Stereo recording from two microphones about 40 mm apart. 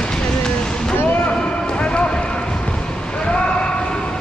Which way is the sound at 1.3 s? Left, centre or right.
Left.